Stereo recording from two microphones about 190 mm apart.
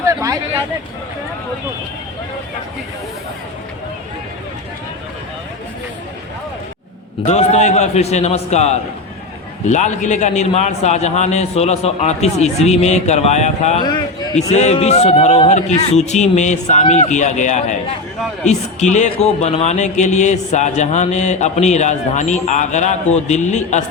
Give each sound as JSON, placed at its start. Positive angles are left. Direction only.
{"t": 0.1, "sound": "a sound", "side_deg": -15}
{"t": 7.3, "sound": "speech", "side_deg": 35}
{"t": 13.8, "sound": "a man's voice", "side_deg": 20}
{"t": 14.5, "sound": "speech", "side_deg": 35}